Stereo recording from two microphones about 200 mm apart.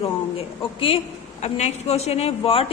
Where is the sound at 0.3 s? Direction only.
30° left (ahead or behind).